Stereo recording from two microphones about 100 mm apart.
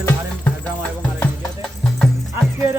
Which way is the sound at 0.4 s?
15° left (ahead or behind).